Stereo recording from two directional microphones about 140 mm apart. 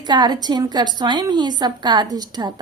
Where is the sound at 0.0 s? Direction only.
30° right (ahead or behind).